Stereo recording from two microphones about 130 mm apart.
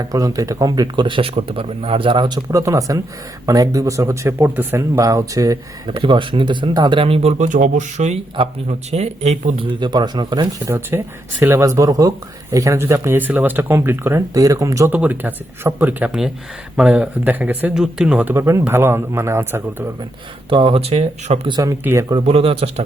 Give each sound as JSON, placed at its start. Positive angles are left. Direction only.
{"t": 0.0, "sound": "speech", "side_deg": -25}
{"t": 5.9, "sound": "speech", "side_deg": -40}
{"t": 9.8, "sound": "speech", "side_deg": -35}
{"t": 10.8, "sound": "speech", "side_deg": -15}
{"t": 14.9, "sound": "speech", "side_deg": -10}
{"t": 20.5, "sound": "speech", "side_deg": -40}
{"t": 21.6, "sound": "speech", "side_deg": -25}
{"t": 22.1, "sound": "speech", "side_deg": -45}